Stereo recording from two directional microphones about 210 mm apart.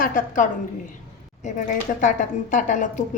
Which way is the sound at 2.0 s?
35° left (ahead or behind).